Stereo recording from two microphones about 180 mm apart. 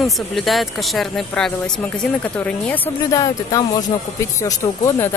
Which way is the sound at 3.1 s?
20° left (ahead or behind).